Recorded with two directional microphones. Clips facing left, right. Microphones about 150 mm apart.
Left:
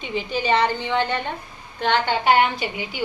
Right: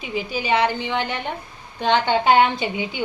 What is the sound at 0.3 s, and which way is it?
A woman's voice, 10° right (ahead or behind).